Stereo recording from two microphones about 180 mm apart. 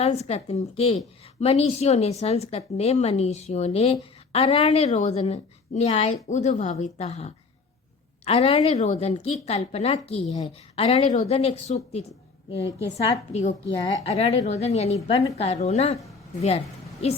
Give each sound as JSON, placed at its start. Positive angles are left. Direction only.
{"t": 0.0, "sound": "a woman's voice", "side_deg": 35}
{"t": 13.3, "sound": "a woman's voice", "side_deg": 40}